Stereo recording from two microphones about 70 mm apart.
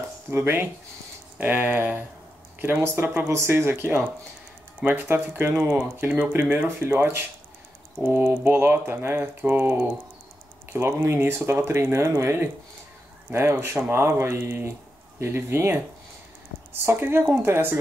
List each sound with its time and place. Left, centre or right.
0.4 s speech: right
16.8 s speech: right